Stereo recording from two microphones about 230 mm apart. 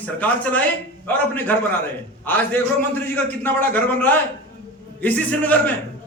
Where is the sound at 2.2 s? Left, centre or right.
Centre.